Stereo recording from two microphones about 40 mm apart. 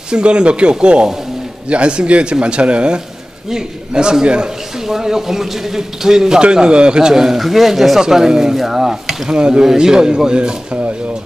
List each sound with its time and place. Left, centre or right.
0.1 s a man's voice: right
7.4 s speech: centre
8.0 s a man's voice: centre